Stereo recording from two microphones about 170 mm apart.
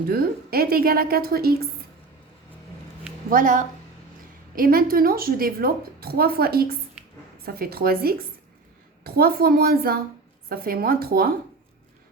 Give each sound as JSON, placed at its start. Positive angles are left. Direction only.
{"t": 0.1, "sound": "a woman's voice", "side_deg": -65}
{"t": 3.2, "sound": "a woman's voice", "side_deg": -50}